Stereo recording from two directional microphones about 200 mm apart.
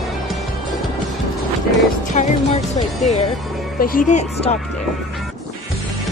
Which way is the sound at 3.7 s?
45° left (ahead or behind).